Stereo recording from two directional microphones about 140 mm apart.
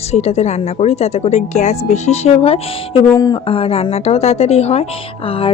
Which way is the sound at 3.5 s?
40° left (ahead or behind).